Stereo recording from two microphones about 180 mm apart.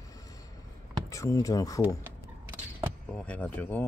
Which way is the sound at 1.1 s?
15° left (ahead or behind).